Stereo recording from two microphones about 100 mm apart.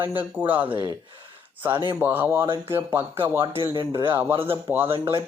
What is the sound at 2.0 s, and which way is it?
Speech, 20° right (ahead or behind).